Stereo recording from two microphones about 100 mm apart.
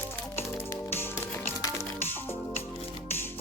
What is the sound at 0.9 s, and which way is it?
Music, 25° left (ahead or behind).